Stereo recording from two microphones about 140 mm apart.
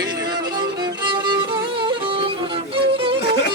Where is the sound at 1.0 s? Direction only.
35° right (ahead or behind).